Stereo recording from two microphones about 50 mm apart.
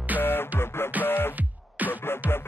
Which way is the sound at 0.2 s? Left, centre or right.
Left.